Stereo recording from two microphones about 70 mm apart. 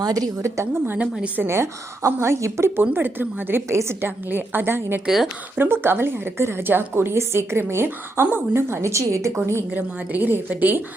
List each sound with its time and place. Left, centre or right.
0.0 s a woman's voice: right
0.4 s a woman's voice: right
2.9 s a woman's voice: right
3.7 s a woman's voice: right
5.0 s speech: centre
5.5 s a woman's voice: right
9.7 s a woman's voice: right